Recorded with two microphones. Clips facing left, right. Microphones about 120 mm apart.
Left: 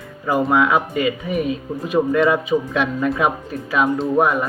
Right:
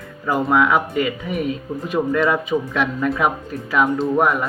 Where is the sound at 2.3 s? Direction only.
15° left (ahead or behind).